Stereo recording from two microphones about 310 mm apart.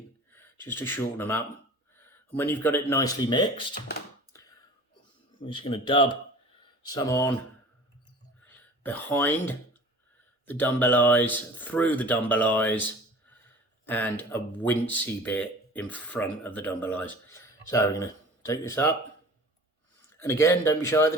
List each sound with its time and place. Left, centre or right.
0.3 s speech: centre
5.4 s speech: centre
8.4 s speech: centre
13.8 s speech: centre
20.1 s speech: centre